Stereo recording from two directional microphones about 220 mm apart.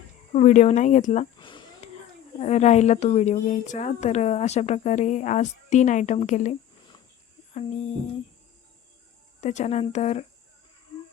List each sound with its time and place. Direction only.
0.3 s speech: 30° left (ahead or behind)
1.4 s a sound: 20° left (ahead or behind)
2.4 s speech: 30° left (ahead or behind)
9.4 s speech: 30° left (ahead or behind)